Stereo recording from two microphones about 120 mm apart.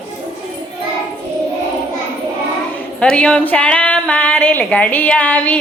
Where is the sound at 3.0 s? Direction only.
10° left (ahead or behind).